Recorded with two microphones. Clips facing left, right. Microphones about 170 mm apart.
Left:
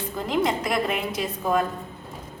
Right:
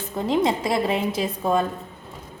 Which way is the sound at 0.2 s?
25° right (ahead or behind).